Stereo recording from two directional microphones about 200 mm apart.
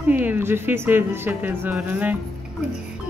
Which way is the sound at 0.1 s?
10° right (ahead or behind).